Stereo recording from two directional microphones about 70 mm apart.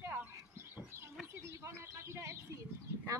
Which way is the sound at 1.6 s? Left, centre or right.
Right.